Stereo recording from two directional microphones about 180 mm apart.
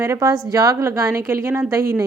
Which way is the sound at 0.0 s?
15° right (ahead or behind).